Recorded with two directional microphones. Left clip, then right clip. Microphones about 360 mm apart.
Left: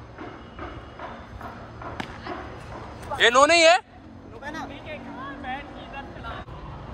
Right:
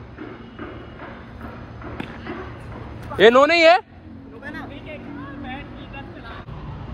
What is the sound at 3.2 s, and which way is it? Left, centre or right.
Speech, centre.